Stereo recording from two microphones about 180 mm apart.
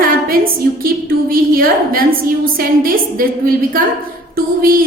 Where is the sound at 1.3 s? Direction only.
55° right (ahead or behind).